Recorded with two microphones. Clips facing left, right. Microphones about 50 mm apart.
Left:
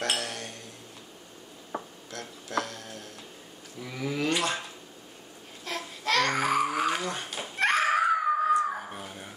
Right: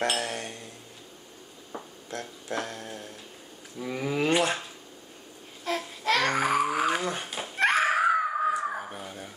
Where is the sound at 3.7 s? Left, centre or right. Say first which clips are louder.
Right 3 dB; right.